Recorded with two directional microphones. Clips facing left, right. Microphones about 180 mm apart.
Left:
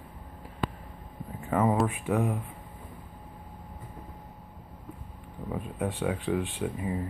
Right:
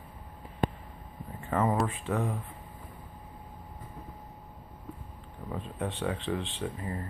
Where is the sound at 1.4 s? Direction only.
5° left (ahead or behind).